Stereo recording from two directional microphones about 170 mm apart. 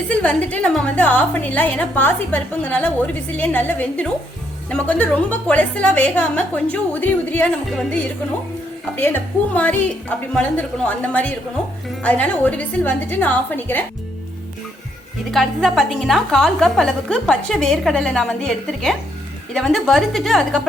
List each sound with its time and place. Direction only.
0.1 s a woman's voice: 5° left (ahead or behind)
15.3 s a woman's voice: centre (ahead or behind)